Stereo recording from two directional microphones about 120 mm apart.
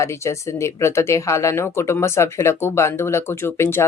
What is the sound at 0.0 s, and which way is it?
Speech, 25° left (ahead or behind).